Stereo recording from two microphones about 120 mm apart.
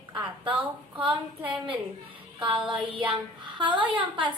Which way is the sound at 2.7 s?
40° right (ahead or behind).